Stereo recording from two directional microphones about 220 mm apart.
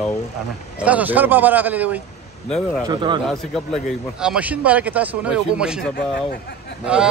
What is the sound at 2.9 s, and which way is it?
Speech, 20° right (ahead or behind).